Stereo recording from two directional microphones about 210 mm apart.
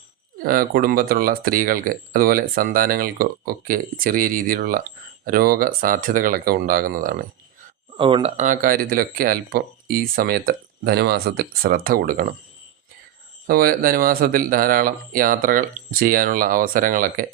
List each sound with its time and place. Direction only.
0.4 s speech: 45° right (ahead or behind)
7.9 s speech: 25° right (ahead or behind); by 12.4 s 45° right (ahead or behind)
13.5 s speech: 45° right (ahead or behind)